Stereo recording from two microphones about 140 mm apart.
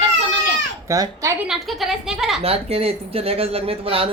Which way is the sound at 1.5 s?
Centre (ahead or behind).